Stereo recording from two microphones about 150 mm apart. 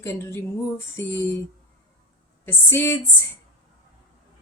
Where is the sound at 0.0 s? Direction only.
15° left (ahead or behind).